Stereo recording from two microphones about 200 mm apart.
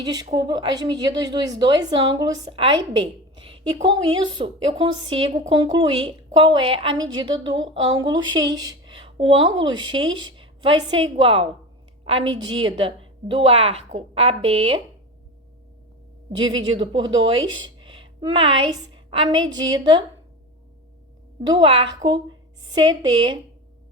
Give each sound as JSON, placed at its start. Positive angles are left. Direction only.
{"t": 0.0, "sound": "a woman's voice", "side_deg": -20}
{"t": 16.4, "sound": "a woman's voice", "side_deg": -25}
{"t": 21.5, "sound": "a woman's voice", "side_deg": -25}